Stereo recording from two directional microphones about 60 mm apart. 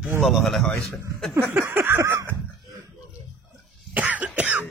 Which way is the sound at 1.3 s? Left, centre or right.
Right.